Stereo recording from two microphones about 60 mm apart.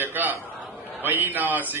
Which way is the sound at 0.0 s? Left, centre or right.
Right.